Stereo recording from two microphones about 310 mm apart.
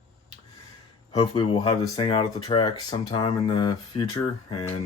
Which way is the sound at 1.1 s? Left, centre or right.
Centre.